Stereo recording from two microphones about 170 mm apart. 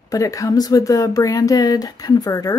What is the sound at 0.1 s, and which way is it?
Speech, 20° left (ahead or behind).